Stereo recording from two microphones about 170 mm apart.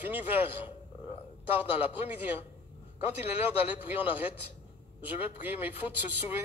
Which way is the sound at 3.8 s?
10° right (ahead or behind).